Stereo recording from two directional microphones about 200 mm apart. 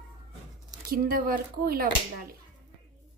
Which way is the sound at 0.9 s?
45° right (ahead or behind).